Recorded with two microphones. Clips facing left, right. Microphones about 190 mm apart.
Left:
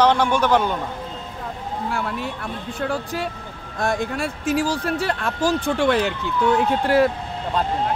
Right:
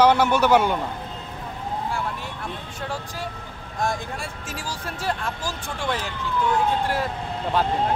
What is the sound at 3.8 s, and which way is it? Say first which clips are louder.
Speech: left 7 dB; 65° left (ahead or behind).